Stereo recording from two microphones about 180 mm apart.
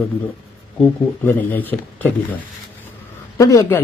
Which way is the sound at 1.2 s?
10° left (ahead or behind).